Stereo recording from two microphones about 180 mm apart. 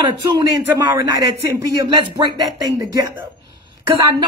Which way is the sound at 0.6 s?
20° right (ahead or behind).